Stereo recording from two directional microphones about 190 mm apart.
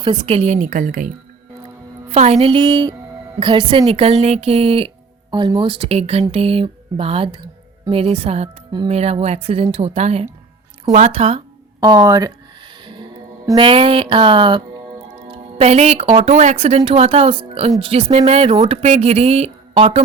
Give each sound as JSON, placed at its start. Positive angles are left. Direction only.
{"t": 0.0, "sound": "speech", "side_deg": -25}